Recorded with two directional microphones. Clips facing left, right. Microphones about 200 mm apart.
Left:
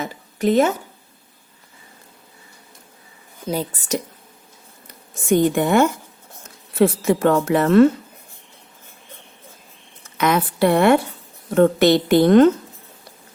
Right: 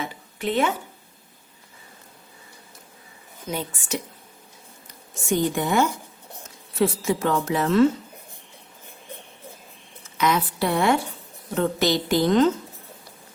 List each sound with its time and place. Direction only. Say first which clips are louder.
0.0 s a sound: left 7 dB; 40° left (ahead or behind)
3.4 s a woman's voice: left 6 dB; 35° left (ahead or behind)
5.3 s a woman's voice: left 6 dB; 60° left (ahead or behind)
10.2 s a woman's voice: left 5 dB; 55° left (ahead or behind)